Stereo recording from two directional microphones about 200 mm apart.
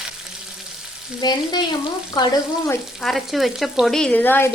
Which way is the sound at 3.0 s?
Centre (ahead or behind).